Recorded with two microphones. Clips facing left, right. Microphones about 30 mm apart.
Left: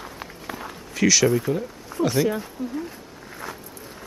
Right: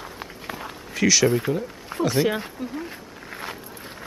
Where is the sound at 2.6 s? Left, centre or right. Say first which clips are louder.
Left 2 dB; right.